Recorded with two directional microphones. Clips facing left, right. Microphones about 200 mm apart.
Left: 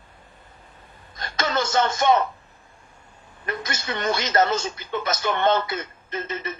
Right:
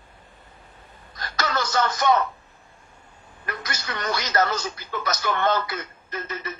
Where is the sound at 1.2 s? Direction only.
25° left (ahead or behind).